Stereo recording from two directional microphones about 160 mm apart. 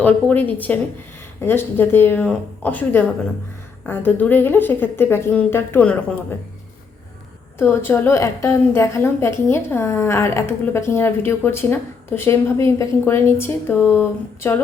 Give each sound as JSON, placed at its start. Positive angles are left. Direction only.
{"t": 0.0, "sound": "a woman's voice", "side_deg": 10}
{"t": 7.6, "sound": "a woman's voice", "side_deg": 15}